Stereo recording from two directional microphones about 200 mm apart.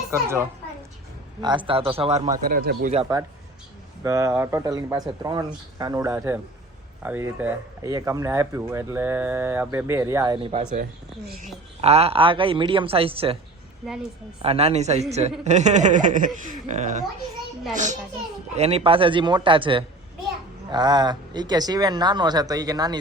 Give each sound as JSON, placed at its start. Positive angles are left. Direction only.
{"t": 0.1, "sound": "speech", "side_deg": -15}
{"t": 1.4, "sound": "speech", "side_deg": -25}
{"t": 4.0, "sound": "speech", "side_deg": -15}
{"t": 11.8, "sound": "speech", "side_deg": -30}
{"t": 14.4, "sound": "speech", "side_deg": -30}
{"t": 18.5, "sound": "speech", "side_deg": -30}